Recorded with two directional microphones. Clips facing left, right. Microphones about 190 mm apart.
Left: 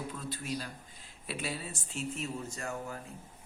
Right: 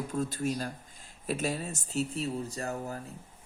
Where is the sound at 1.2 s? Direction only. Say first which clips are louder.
Right 6 dB; 45° right (ahead or behind).